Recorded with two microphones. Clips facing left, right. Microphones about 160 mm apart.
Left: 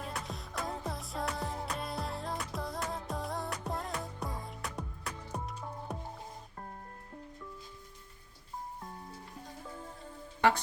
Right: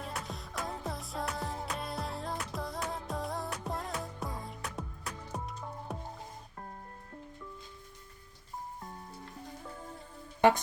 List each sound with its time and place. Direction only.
0.0 s music: centre (ahead or behind)